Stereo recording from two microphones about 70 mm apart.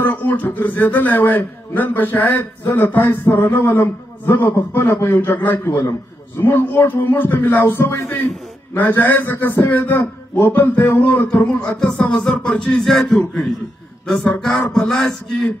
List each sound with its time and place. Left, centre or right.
0.0 s a man's voice: left
5.6 s a man's voice: left
11.3 s a man's voice: centre
14.7 s a man's voice: centre